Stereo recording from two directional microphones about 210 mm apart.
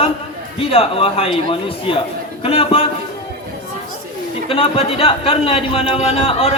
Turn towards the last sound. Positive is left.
turn(degrees=25)  # may be behind; listen again after turning